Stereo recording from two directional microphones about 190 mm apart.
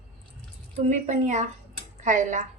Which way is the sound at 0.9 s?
40° right (ahead or behind).